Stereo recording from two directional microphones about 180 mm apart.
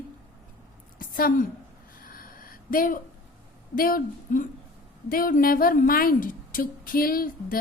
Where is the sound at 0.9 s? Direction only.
50° left (ahead or behind).